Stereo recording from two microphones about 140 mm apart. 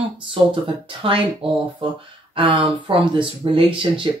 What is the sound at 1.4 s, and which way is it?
Speech, 40° right (ahead or behind).